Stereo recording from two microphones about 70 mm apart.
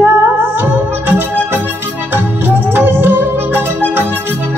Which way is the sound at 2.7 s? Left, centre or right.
Right.